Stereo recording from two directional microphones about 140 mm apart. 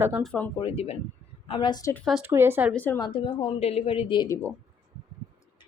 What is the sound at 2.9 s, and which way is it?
A woman's voice, 35° left (ahead or behind).